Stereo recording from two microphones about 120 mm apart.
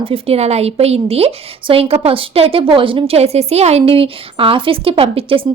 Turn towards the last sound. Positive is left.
turn(degrees=-50)  # may be behind; listen again after turning